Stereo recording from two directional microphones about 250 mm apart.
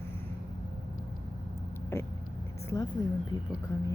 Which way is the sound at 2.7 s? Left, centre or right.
Centre.